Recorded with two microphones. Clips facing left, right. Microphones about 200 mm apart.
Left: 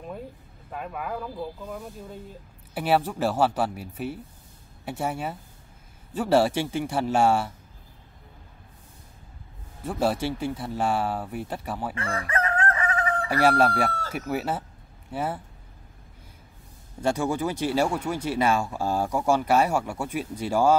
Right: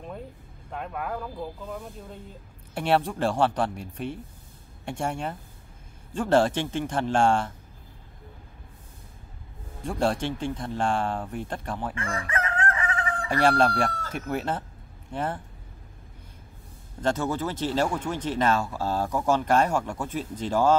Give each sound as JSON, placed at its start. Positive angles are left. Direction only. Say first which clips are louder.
{"t": 0.7, "sound": "speech", "louder": "even", "side_deg": 0}
{"t": 9.8, "sound": "speech", "louder": "left 1 dB", "side_deg": 5}
{"t": 11.9, "sound": "chicken", "louder": "left 2 dB", "side_deg": 35}
{"t": 13.3, "sound": "speech", "louder": "even", "side_deg": 5}
{"t": 17.0, "sound": "speech", "louder": "left 1 dB", "side_deg": 10}